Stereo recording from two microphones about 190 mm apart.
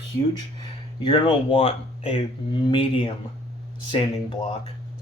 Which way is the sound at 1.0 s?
25° left (ahead or behind).